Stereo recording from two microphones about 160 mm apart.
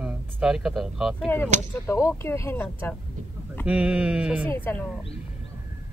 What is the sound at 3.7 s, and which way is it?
Speech, 5° right (ahead or behind).